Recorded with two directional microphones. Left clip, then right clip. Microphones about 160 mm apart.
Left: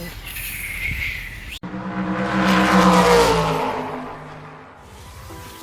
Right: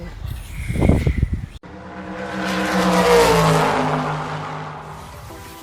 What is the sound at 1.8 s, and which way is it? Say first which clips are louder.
Vehicle: left 5 dB; 15° left (ahead or behind).